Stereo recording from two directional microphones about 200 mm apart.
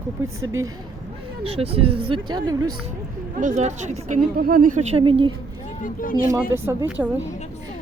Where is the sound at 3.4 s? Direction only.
35° right (ahead or behind).